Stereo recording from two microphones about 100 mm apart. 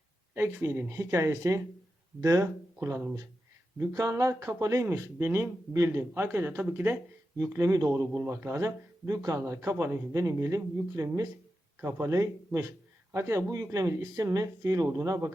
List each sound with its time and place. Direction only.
0.3 s speech: 25° right (ahead or behind)
3.8 s speech: 35° right (ahead or behind)